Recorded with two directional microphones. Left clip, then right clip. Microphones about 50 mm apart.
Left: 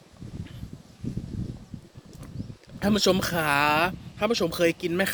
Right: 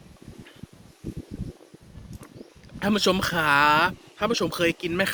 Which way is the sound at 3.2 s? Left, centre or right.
Centre.